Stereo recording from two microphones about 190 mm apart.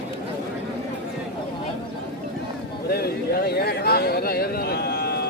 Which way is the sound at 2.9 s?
55° left (ahead or behind).